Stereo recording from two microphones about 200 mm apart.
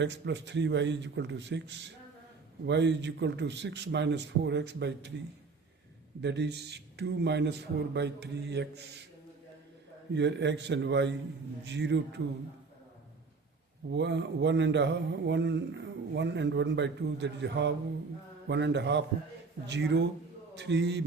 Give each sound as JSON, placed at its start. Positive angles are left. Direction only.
{"t": 0.0, "sound": "speech", "side_deg": -60}
{"t": 6.2, "sound": "speech", "side_deg": -60}
{"t": 10.1, "sound": "speech", "side_deg": -60}
{"t": 13.9, "sound": "speech", "side_deg": -60}